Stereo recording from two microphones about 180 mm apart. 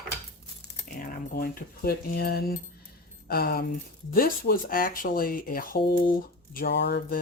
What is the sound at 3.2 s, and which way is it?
Speech, 60° left (ahead or behind).